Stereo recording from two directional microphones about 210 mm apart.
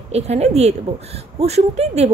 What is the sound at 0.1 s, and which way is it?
A woman's voice, 30° right (ahead or behind).